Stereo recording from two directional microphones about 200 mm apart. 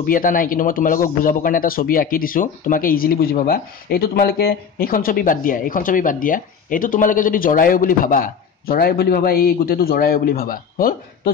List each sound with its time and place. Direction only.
0.0 s speech: 45° left (ahead or behind)